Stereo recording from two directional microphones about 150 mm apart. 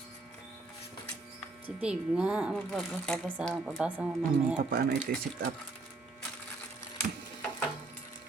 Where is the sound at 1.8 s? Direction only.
5° right (ahead or behind).